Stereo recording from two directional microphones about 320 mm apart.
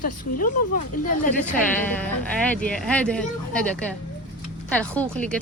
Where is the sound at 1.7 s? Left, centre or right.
Centre.